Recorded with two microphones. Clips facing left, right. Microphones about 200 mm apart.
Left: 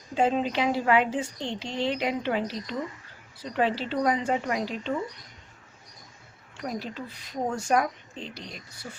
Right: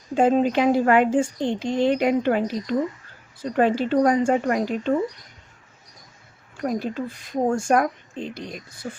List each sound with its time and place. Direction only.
0.1 s speech: 50° right (ahead or behind)
6.6 s speech: 50° right (ahead or behind)